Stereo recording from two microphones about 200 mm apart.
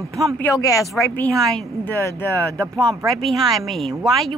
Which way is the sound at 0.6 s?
15° left (ahead or behind).